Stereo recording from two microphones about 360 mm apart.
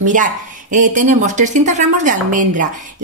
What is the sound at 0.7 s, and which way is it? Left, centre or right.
Speech, right.